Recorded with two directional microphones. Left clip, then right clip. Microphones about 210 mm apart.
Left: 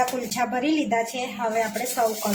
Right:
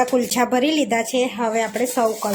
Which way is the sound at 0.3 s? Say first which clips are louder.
Right 3 dB; 50° right (ahead or behind).